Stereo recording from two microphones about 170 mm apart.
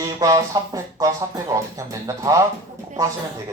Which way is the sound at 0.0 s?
20° right (ahead or behind).